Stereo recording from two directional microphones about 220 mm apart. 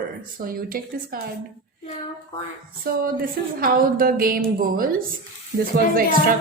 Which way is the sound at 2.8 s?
40° right (ahead or behind).